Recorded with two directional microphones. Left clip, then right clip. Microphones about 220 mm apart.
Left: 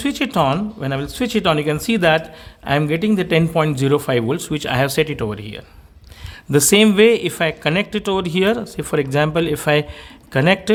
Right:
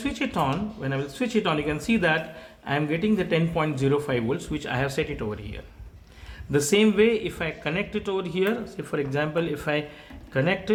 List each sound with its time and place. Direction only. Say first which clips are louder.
0.0 s speech: left 8 dB; 50° left (ahead or behind)